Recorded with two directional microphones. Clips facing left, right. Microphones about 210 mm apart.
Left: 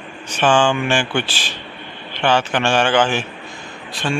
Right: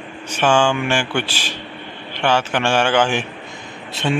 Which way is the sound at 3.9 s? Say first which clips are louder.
Right 2 dB; 25° right (ahead or behind).